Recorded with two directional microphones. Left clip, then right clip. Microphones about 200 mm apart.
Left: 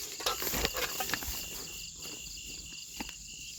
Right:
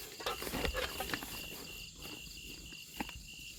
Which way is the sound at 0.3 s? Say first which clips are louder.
Left 4 dB; 55° left (ahead or behind).